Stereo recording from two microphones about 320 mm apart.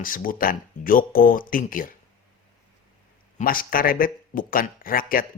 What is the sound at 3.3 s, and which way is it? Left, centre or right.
A man's voice, left.